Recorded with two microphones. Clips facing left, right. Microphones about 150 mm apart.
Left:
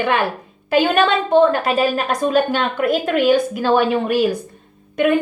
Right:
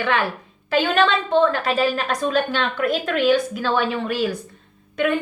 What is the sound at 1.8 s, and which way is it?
Speech, 45° left (ahead or behind).